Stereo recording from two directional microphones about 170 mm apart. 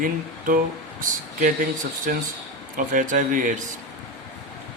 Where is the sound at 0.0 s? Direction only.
55° right (ahead or behind).